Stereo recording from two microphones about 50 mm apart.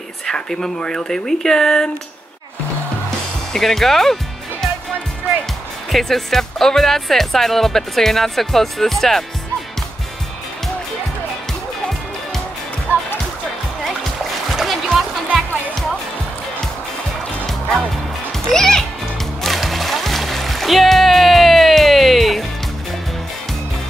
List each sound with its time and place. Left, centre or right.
0.3 s speech: centre
3.5 s speech: centre
5.9 s speech: centre
12.9 s music: right
14.5 s music: centre
17.5 s music: centre